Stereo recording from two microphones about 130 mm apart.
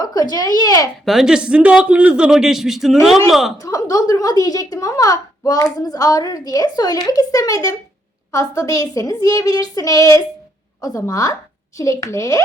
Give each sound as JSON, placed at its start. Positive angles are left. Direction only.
{"t": 0.0, "sound": "speech", "side_deg": 30}
{"t": 1.0, "sound": "a man's voice", "side_deg": -5}
{"t": 3.6, "sound": "a woman's voice", "side_deg": 25}